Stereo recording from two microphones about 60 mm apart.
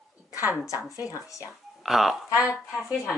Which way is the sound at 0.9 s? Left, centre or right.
Left.